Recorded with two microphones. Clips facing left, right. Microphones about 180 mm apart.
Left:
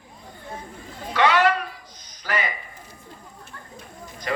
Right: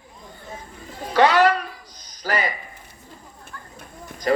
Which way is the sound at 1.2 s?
40° right (ahead or behind).